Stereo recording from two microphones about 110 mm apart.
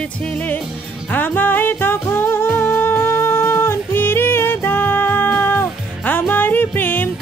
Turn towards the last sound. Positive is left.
turn(degrees=20)  # may be behind; listen again after turning